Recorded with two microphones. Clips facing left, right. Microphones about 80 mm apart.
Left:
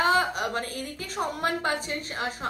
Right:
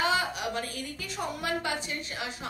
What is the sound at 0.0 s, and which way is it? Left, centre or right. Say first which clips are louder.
A woman's voice: left 4 dB; left.